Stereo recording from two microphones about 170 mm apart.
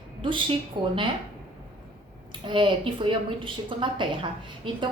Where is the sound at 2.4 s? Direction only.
30° right (ahead or behind).